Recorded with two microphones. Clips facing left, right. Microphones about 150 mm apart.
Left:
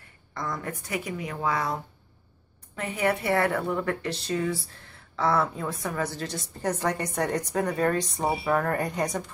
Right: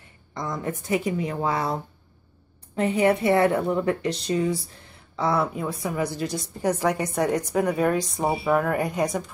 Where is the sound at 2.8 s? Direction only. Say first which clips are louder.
Right 6 dB; 25° right (ahead or behind).